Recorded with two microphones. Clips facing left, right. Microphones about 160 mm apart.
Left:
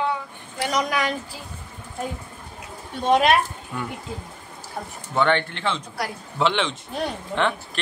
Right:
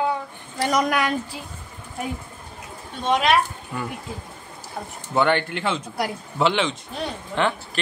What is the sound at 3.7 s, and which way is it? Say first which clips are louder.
Speech: right 1 dB; 5° right (ahead or behind).